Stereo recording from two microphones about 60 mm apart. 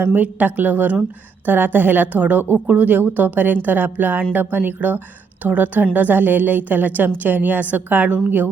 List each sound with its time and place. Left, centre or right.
0.0 s a woman's voice: right